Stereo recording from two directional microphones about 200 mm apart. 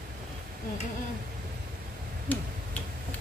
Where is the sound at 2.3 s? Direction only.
10° left (ahead or behind).